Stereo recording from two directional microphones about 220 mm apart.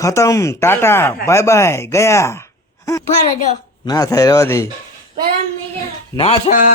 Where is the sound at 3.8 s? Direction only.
15° left (ahead or behind).